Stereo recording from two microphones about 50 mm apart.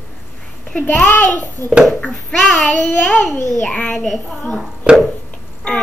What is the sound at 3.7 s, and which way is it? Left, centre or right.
Babbling, centre.